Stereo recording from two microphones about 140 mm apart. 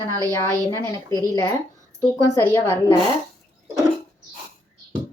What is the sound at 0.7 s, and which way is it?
Speech, 20° left (ahead or behind).